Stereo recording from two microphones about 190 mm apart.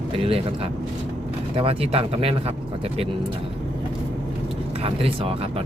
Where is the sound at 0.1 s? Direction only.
30° right (ahead or behind).